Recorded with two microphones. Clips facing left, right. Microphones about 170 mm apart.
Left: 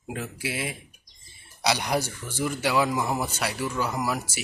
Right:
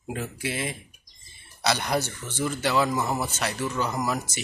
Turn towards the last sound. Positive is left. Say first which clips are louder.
# even
turn(degrees=10)  # may be behind; listen again after turning